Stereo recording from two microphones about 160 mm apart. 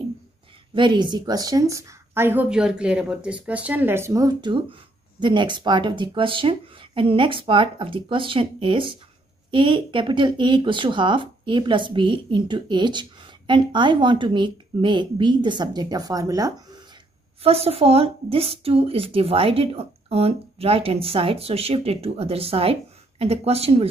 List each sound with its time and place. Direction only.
0.7 s a woman's voice: 30° right (ahead or behind)
17.4 s speech: 40° right (ahead or behind)